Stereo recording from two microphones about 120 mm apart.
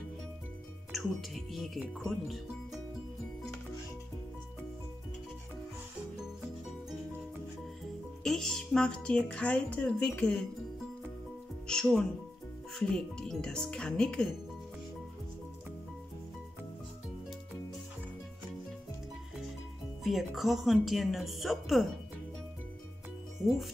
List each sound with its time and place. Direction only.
0.9 s speech: centre (ahead or behind)
8.2 s speech: 5° left (ahead or behind)
11.6 s speech: 5° left (ahead or behind)
20.0 s speech: centre (ahead or behind)